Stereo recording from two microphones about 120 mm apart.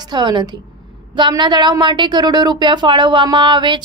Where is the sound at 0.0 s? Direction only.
35° right (ahead or behind).